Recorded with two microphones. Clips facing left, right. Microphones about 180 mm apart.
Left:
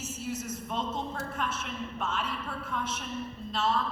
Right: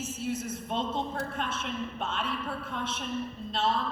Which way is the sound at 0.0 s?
55° right (ahead or behind).